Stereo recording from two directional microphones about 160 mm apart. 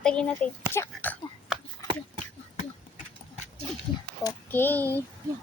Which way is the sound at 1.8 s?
25° right (ahead or behind).